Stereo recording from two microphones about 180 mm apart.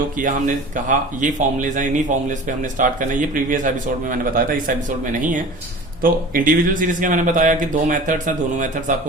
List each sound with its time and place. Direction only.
0.2 s speech: 45° right (ahead or behind)